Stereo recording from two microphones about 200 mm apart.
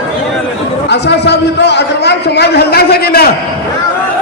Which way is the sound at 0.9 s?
60° left (ahead or behind).